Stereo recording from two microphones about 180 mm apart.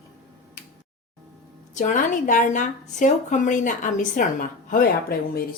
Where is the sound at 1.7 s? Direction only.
40° left (ahead or behind).